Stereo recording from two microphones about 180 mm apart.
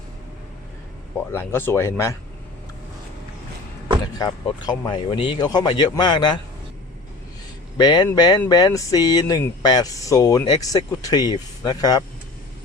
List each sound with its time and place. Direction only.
1.3 s speech: 15° left (ahead or behind)
4.2 s speech: 25° left (ahead or behind)
7.8 s speech: 25° left (ahead or behind)